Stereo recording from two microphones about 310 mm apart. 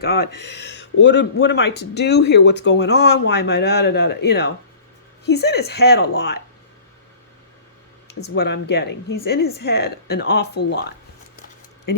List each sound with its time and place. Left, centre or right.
0.0 s speech: left
8.0 s speech: left